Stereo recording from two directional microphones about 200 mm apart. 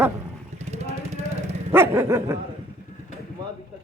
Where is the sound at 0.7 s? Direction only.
35° right (ahead or behind).